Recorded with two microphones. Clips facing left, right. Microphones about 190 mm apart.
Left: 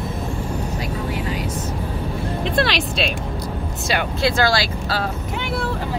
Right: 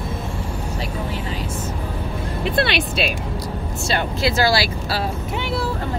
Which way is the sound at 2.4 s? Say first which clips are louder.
Right 1 dB; 5° right (ahead or behind).